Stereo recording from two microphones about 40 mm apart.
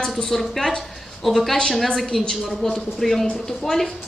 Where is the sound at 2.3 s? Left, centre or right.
Centre.